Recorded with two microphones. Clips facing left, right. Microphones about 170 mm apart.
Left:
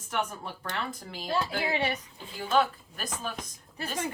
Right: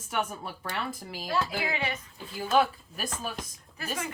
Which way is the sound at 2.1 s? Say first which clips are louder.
Right 2 dB; 5° right (ahead or behind).